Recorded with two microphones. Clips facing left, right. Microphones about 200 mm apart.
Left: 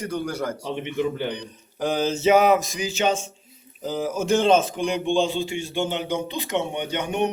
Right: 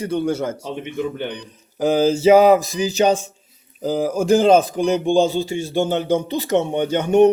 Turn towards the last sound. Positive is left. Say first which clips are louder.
# right 10 dB
turn(degrees=-45)  # may be behind; listen again after turning